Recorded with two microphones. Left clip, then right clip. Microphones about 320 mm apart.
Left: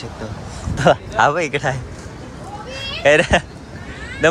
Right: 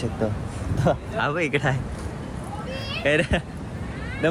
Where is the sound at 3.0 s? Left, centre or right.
Centre.